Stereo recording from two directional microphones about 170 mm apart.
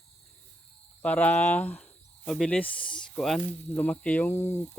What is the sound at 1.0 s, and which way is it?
Speech, 10° left (ahead or behind).